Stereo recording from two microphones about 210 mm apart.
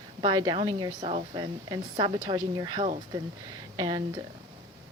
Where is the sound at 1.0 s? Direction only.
35° right (ahead or behind).